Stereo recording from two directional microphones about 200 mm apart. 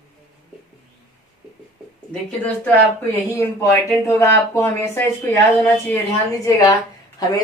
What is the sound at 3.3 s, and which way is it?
A woman's voice, 15° left (ahead or behind).